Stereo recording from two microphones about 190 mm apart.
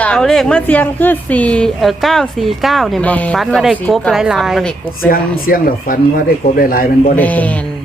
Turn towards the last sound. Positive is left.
turn(degrees=10)  # may be behind; listen again after turning